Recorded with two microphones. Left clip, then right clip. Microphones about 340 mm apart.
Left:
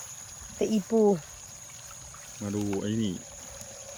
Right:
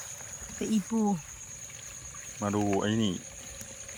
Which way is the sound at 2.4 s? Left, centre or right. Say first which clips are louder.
Right 4 dB; centre.